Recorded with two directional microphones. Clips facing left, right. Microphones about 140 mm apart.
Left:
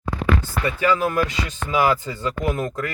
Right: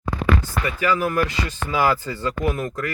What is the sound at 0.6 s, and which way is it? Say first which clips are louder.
Speech: left 3 dB; 25° left (ahead or behind).